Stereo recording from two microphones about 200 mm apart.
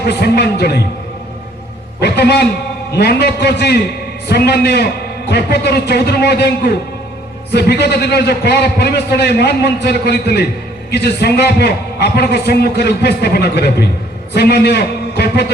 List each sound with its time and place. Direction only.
0.1 s a man's voice: 55° left (ahead or behind)
2.0 s a man's voice: 55° left (ahead or behind)